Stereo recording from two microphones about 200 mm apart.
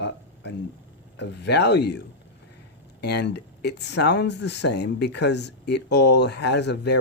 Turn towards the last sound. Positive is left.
turn(degrees=55)  # may be behind; listen again after turning